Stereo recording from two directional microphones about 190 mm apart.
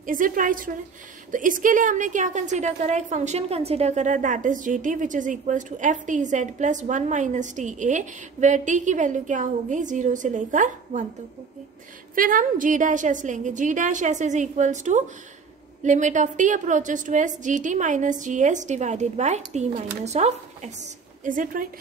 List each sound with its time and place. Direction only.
0.0 s a woman's voice: 45° right (ahead or behind)
12.2 s a woman's voice: 45° right (ahead or behind)